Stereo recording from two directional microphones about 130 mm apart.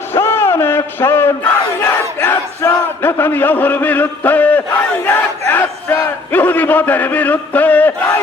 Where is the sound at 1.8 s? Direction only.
15° left (ahead or behind).